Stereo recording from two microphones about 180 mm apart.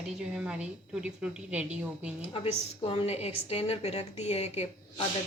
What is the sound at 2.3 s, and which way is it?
A woman's voice, 30° left (ahead or behind).